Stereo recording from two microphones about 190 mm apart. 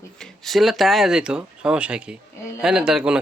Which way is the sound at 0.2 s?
Centre (ahead or behind).